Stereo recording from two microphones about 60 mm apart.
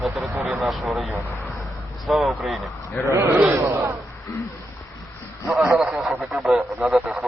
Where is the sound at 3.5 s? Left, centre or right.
Right.